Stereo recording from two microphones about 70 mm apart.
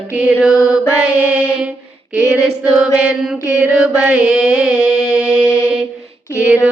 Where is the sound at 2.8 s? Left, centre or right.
Centre.